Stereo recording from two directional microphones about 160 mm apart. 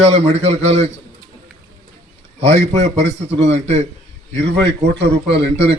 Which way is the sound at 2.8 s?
90° right.